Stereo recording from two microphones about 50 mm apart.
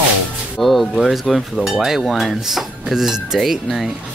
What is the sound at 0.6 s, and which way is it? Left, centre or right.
Dishes, centre.